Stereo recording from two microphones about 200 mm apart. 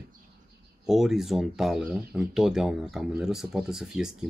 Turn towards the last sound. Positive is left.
turn(degrees=-5)  # may be behind; listen again after turning